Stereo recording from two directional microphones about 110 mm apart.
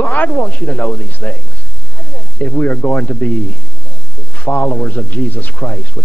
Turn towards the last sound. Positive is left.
turn(degrees=15)  # may be behind; listen again after turning